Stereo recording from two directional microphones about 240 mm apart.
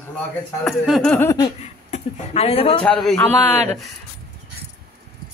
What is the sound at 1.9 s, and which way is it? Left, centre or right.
Speech, left.